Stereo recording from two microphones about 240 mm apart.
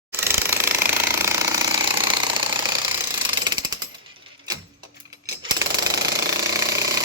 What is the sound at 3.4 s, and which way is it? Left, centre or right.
Jackhammer, centre.